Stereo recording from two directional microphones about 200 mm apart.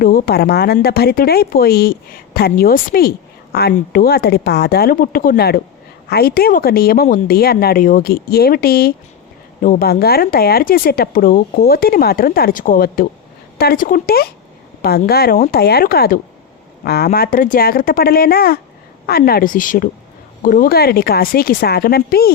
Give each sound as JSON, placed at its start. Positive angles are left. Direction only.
{"t": 0.0, "sound": "speech", "side_deg": 45}